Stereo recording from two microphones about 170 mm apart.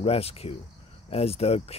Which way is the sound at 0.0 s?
35° left (ahead or behind).